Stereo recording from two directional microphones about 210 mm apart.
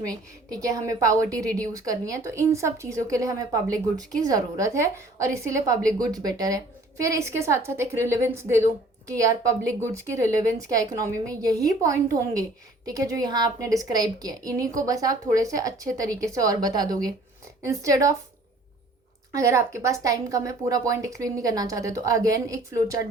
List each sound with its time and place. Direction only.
0.5 s a woman's voice: 15° right (ahead or behind)
19.3 s a woman's voice: 15° right (ahead or behind)